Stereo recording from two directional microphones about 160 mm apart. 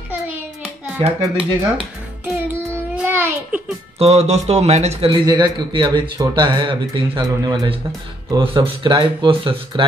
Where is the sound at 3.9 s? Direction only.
40° right (ahead or behind).